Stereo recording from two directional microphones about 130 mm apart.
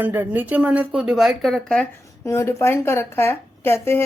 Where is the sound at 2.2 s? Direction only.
25° left (ahead or behind).